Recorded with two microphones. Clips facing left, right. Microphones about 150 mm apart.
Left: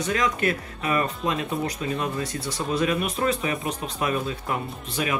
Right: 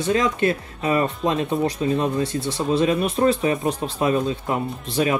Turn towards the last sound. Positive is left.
turn(degrees=-30)  # may be behind; listen again after turning